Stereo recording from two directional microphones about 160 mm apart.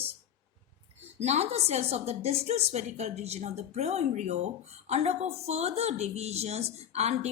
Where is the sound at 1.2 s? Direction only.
45° right (ahead or behind).